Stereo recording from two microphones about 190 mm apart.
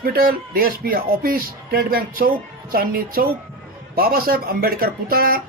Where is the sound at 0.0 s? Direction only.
50° right (ahead or behind).